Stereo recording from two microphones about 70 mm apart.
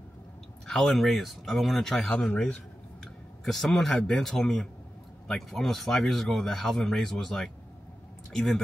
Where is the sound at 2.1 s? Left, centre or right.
Centre.